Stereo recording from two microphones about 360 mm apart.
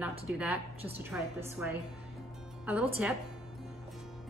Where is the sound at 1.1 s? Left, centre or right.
Centre.